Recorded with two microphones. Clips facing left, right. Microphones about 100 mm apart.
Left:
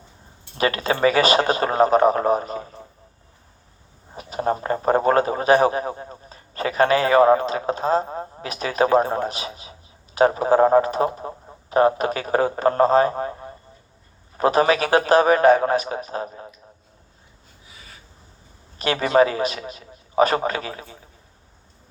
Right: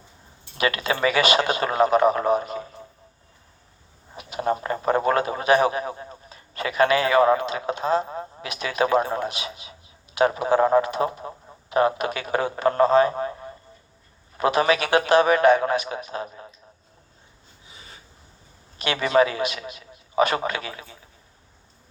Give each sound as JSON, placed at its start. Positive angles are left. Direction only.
{"t": 0.5, "sound": "a sound", "side_deg": 35}
{"t": 4.1, "sound": "a man's voice", "side_deg": 35}
{"t": 17.7, "sound": "filing", "side_deg": -25}
{"t": 18.8, "sound": "a man's voice", "side_deg": 40}